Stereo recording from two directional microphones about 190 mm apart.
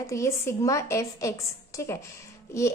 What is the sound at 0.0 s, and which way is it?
A child's voice, 15° left (ahead or behind).